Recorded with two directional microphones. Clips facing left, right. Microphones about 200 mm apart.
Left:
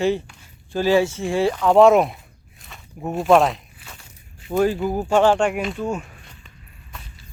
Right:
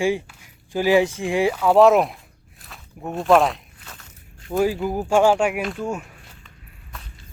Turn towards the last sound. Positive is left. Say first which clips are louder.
# left 1 dB
turn(degrees=-5)  # may be behind; listen again after turning